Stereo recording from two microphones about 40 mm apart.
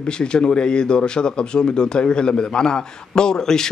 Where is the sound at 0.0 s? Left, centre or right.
Left.